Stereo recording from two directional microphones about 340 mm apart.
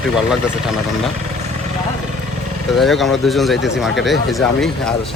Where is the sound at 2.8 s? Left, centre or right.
Centre.